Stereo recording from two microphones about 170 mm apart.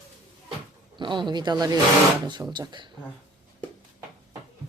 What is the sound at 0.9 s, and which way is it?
Speech, 25° right (ahead or behind).